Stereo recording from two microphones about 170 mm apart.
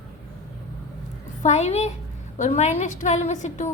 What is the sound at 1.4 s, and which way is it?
A child's voice, 40° left (ahead or behind).